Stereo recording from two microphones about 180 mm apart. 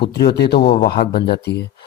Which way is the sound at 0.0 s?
65° left (ahead or behind).